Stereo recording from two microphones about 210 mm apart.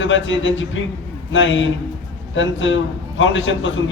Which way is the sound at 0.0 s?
65° left (ahead or behind).